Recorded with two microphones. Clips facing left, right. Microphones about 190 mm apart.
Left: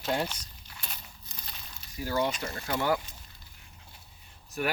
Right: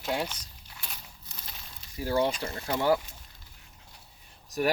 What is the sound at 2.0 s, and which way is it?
Speech, 30° right (ahead or behind).